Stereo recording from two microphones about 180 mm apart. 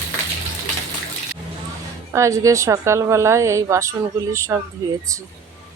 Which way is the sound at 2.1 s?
15° right (ahead or behind).